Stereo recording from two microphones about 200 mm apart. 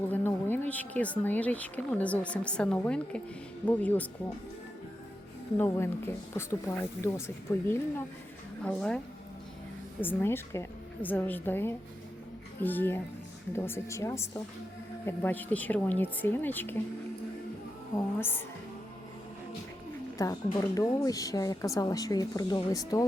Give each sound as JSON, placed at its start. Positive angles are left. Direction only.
{"t": 0.1, "sound": "speech", "side_deg": 10}
{"t": 5.5, "sound": "speech", "side_deg": 10}
{"t": 10.0, "sound": "speech", "side_deg": 10}
{"t": 18.2, "sound": "speech", "side_deg": 10}
{"t": 20.1, "sound": "speech", "side_deg": 15}